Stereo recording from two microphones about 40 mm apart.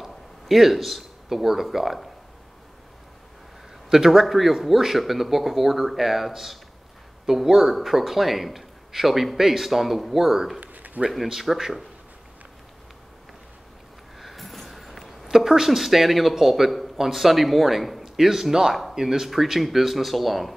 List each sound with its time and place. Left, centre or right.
0.0 s speech: centre
3.9 s a man's voice: centre
10.6 s a sound: right
11.1 s a man's voice: centre
14.2 s a sound: centre
15.2 s a man's voice: centre